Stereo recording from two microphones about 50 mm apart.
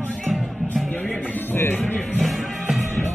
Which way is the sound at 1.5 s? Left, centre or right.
Left.